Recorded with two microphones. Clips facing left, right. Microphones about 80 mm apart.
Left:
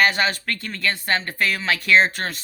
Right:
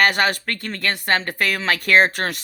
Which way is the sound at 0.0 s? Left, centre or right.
Right.